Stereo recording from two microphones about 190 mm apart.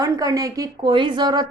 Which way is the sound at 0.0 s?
20° right (ahead or behind).